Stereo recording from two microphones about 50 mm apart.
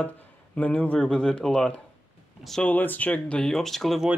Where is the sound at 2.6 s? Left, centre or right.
Left.